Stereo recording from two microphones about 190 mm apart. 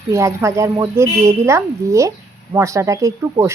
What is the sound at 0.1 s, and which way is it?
Speech, 15° right (ahead or behind).